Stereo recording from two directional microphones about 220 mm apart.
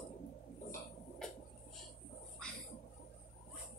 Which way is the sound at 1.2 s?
Centre (ahead or behind).